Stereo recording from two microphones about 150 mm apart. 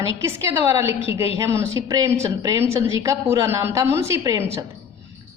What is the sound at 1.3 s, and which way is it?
A woman's voice, 20° right (ahead or behind).